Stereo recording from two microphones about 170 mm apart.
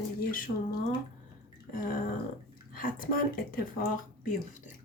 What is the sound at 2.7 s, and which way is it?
Speech, 55° left (ahead or behind).